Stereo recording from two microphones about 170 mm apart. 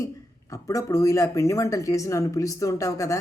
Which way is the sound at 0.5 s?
20° left (ahead or behind).